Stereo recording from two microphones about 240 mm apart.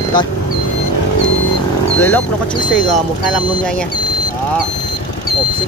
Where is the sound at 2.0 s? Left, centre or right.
Centre.